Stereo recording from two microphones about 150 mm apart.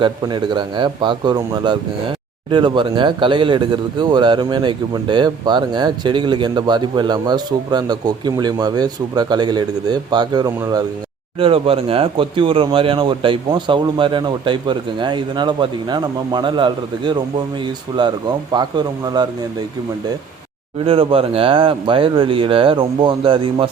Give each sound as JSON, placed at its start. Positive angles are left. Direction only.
{"t": 0.0, "sound": "speech", "side_deg": -30}
{"t": 18.5, "sound": "speech", "side_deg": -30}
{"t": 20.8, "sound": "speech", "side_deg": -40}